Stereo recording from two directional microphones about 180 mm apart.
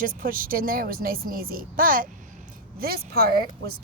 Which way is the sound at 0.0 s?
50° right (ahead or behind).